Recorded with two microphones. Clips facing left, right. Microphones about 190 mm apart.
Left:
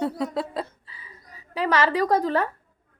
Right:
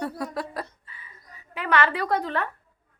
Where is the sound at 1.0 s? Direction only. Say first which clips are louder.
Left 3 dB; 35° left (ahead or behind).